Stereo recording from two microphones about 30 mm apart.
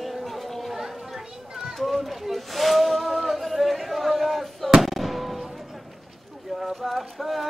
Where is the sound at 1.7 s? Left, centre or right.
Centre.